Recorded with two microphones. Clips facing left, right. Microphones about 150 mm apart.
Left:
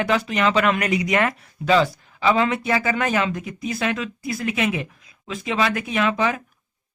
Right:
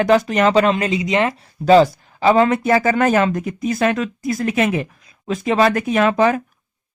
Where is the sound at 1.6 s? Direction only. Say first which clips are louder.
Right 7 dB; 40° right (ahead or behind).